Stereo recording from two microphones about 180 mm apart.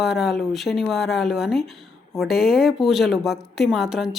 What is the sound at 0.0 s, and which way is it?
A woman's voice, centre (ahead or behind).